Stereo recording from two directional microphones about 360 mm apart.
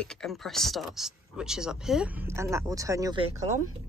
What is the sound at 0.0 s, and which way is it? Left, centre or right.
A woman's voice, centre.